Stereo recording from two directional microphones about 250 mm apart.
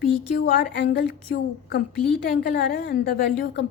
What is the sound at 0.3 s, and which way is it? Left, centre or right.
A woman's voice, left.